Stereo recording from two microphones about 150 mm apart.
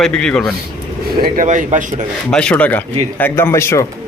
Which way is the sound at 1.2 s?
60° right (ahead or behind).